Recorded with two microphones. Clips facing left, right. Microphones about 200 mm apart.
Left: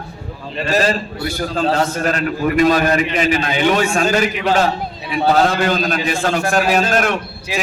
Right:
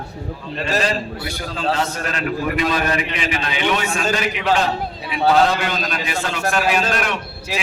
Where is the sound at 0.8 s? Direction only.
45° left (ahead or behind).